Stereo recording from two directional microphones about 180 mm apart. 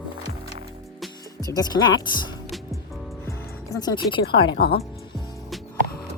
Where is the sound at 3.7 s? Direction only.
20° left (ahead or behind).